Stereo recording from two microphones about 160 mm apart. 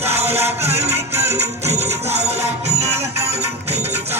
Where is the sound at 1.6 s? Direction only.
45° right (ahead or behind).